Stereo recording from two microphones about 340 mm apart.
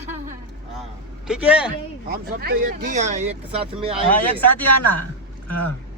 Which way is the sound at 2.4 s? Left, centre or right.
Right.